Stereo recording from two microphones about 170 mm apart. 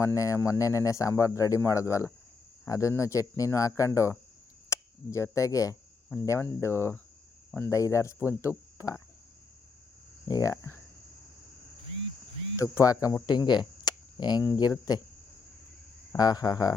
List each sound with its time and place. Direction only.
0.0 s speech: 20° left (ahead or behind)
10.2 s speech: 20° left (ahead or behind)
12.5 s speech: 20° left (ahead or behind)
16.1 s speech: 25° left (ahead or behind)